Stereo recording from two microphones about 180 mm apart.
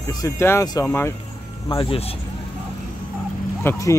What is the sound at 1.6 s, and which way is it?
Speech, 30° left (ahead or behind).